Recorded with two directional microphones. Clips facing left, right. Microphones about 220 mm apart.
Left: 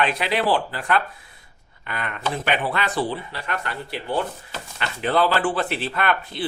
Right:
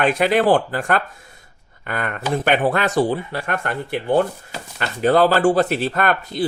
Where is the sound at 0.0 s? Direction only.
50° right (ahead or behind).